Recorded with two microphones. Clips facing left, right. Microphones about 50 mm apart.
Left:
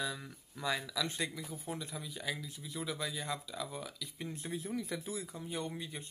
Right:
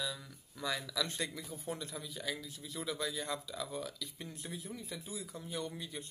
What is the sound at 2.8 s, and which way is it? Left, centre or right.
Speech, centre.